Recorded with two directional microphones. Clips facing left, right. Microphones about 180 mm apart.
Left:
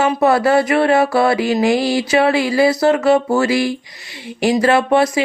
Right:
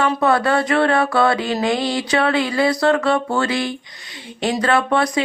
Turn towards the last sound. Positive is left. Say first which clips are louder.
# left 4 dB
turn(degrees=25)  # may be behind; listen again after turning